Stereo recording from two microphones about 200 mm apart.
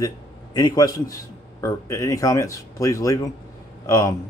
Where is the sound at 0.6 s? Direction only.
20° left (ahead or behind).